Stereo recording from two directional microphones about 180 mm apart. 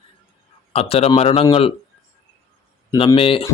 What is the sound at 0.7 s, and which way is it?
Speech, 35° left (ahead or behind).